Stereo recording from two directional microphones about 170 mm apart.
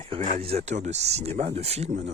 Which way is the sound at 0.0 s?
45° right (ahead or behind).